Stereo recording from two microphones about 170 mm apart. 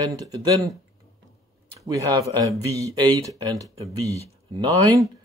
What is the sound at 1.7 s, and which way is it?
Speech, 20° right (ahead or behind).